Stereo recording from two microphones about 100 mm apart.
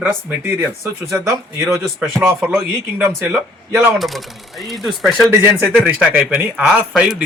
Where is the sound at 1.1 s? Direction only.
30° right (ahead or behind).